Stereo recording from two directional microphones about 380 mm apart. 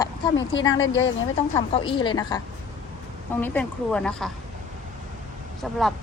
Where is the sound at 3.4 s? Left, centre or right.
Centre.